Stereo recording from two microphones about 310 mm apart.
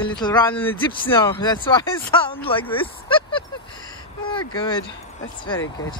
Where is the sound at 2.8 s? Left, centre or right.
Centre.